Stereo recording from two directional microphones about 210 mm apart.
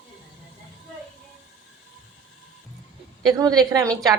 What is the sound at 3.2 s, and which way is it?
Speech, 15° right (ahead or behind).